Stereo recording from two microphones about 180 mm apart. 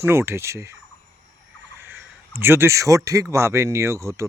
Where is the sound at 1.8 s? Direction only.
10° right (ahead or behind).